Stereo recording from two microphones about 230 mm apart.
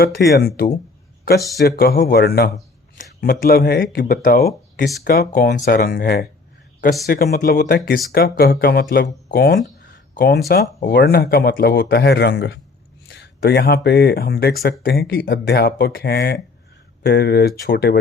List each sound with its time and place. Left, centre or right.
0.0 s speech: left